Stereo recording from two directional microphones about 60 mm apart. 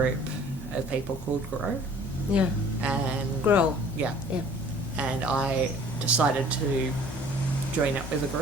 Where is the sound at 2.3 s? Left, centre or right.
Centre.